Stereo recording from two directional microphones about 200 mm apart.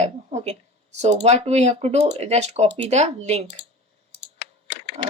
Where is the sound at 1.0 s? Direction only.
35° right (ahead or behind).